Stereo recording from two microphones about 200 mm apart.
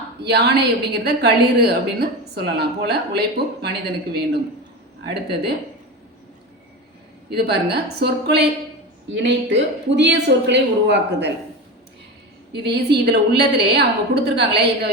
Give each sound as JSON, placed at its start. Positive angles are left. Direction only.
{"t": 0.2, "sound": "a woman's voice", "side_deg": -55}
{"t": 7.3, "sound": "a woman's voice", "side_deg": -55}
{"t": 12.6, "sound": "a woman's voice", "side_deg": -55}